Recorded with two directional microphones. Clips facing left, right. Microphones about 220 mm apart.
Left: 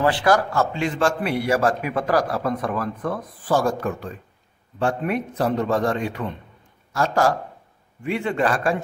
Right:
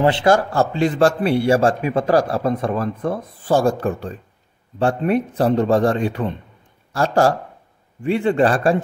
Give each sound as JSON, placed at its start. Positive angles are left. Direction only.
{"t": 0.0, "sound": "a man's voice", "side_deg": -25}